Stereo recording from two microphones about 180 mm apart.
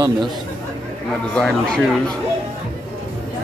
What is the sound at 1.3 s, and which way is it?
Speech, 5° left (ahead or behind).